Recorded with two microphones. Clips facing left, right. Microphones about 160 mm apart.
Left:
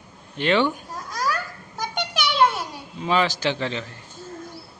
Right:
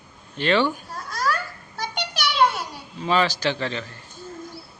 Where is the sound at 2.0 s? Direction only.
50° left (ahead or behind).